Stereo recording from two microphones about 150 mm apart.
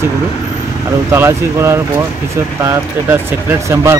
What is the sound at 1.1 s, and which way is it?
Speech, 15° right (ahead or behind).